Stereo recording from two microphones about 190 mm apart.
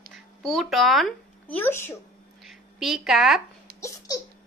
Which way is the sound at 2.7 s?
Centre (ahead or behind).